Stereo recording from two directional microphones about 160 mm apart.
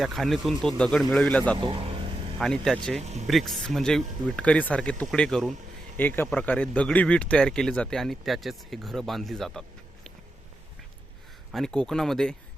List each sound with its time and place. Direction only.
0.0 s speech: centre (ahead or behind)
1.5 s speech: 35° right (ahead or behind)
2.4 s speech: centre (ahead or behind)
3.0 s speech: 45° right (ahead or behind)
3.2 s speech: centre (ahead or behind)
11.5 s speech: 5° left (ahead or behind)